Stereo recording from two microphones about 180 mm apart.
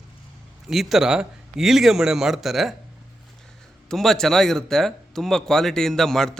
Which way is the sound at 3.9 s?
Centre (ahead or behind).